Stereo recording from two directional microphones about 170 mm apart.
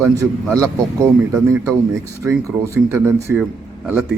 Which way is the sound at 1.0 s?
15° right (ahead or behind).